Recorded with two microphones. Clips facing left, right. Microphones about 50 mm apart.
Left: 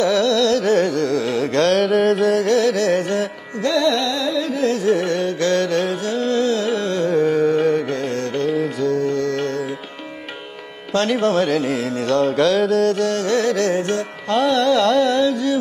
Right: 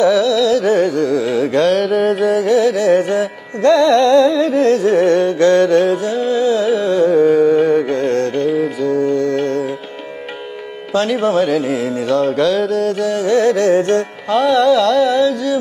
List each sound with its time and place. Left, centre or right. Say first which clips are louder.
0.1 s music: right 3 dB; centre
3.6 s music: right 8 dB; right
6.1 s carnatic music: right 4 dB; centre
7.9 s music: right 6 dB; right
8.5 s music: right 3 dB; centre; by 9.7 s right
10.9 s music: right 2 dB; centre
13.4 s music: right 6 dB; right
14.3 s music: right 4 dB; centre